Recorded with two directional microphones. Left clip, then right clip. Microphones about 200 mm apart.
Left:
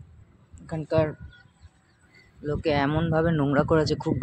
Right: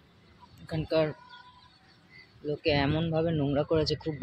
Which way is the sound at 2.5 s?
15° left (ahead or behind).